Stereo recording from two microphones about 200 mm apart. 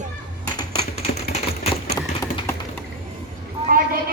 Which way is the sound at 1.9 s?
15° left (ahead or behind).